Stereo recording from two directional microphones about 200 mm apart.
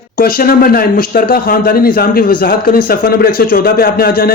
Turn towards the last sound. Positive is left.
turn(degrees=50)  # may be behind; listen again after turning